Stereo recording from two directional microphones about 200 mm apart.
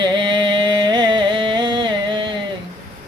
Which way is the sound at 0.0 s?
25° right (ahead or behind).